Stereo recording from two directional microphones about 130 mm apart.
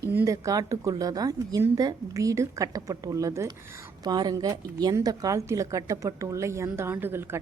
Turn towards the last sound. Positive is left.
turn(degrees=-15)  # may be behind; listen again after turning